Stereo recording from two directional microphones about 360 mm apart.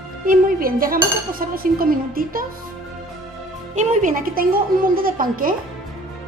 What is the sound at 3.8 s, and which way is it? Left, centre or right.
Dishes, right.